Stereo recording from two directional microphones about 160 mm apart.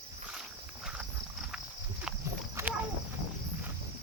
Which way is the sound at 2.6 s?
20° right (ahead or behind).